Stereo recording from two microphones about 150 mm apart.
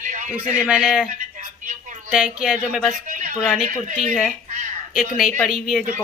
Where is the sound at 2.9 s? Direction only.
60° right (ahead or behind).